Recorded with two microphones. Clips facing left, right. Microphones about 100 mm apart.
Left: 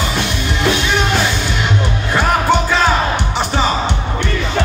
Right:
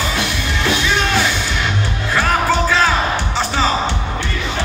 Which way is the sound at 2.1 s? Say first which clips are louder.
Left 2 dB; 20° left (ahead or behind).